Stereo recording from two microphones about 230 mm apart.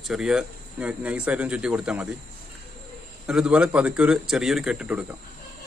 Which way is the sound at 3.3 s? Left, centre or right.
Centre.